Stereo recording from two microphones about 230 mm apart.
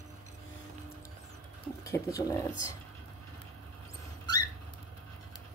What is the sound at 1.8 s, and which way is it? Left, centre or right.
Speech, centre.